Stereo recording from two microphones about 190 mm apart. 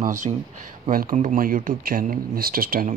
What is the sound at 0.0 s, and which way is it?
Speech, 45° right (ahead or behind).